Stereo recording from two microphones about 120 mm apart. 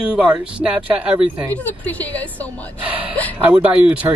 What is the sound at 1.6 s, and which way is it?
Speech, 15° left (ahead or behind).